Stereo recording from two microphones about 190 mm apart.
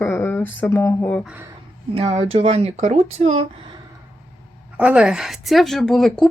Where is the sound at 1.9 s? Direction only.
30° right (ahead or behind).